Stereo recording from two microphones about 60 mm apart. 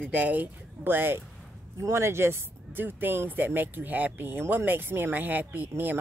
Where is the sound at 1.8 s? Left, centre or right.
Right.